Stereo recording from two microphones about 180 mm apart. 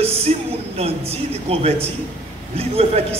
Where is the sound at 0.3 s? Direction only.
40° right (ahead or behind).